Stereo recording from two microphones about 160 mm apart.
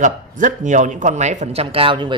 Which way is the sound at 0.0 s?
50° right (ahead or behind).